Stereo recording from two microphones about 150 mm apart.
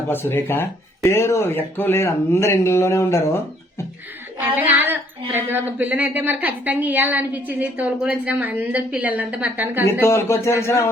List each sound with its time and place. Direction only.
0.1 s speech: 15° left (ahead or behind)
4.4 s speech: 10° right (ahead or behind)
9.8 s a man's voice: 20° left (ahead or behind)